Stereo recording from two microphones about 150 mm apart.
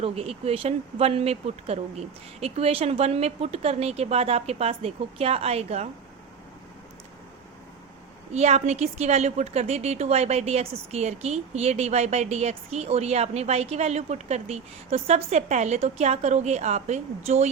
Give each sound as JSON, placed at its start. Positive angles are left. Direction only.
{"t": 0.0, "sound": "a woman's voice", "side_deg": -40}
{"t": 8.3, "sound": "a woman's voice", "side_deg": -50}